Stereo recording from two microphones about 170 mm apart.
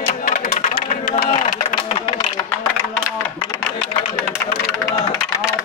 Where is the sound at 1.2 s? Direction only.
45° left (ahead or behind).